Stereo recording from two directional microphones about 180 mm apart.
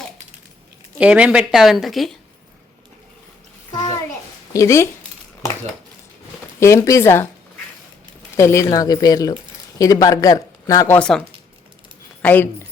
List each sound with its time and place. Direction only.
0.9 s a woman's voice: 5° right (ahead or behind)
3.7 s bathtub: 20° left (ahead or behind)
4.5 s speech: 15° left (ahead or behind)
6.6 s speech: 15° left (ahead or behind)
8.4 s speech: 15° left (ahead or behind)
12.2 s a woman's voice: 10° left (ahead or behind)